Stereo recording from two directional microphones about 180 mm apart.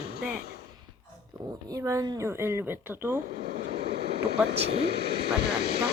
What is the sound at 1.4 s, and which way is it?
Speech, 20° right (ahead or behind).